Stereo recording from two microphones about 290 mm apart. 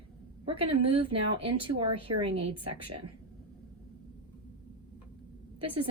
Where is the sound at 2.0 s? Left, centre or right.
Centre.